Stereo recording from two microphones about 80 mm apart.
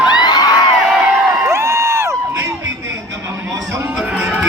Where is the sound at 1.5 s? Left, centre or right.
Right.